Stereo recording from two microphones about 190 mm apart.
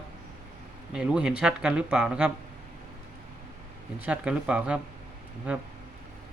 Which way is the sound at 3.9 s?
5° right (ahead or behind).